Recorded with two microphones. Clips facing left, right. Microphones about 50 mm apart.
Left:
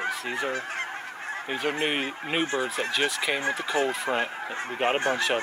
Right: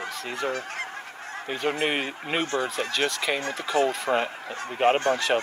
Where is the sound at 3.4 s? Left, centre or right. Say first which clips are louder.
Right 3 dB; centre.